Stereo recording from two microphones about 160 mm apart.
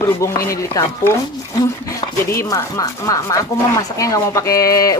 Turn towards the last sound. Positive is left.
turn(degrees=20)  # may be behind; listen again after turning